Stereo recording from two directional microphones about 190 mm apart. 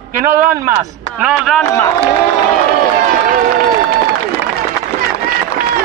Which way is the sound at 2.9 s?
45° right (ahead or behind).